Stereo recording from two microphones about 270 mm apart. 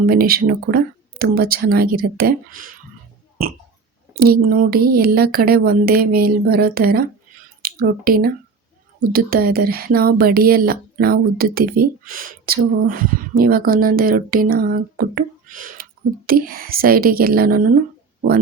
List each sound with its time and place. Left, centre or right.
0.0 s speech: right
4.2 s speech: right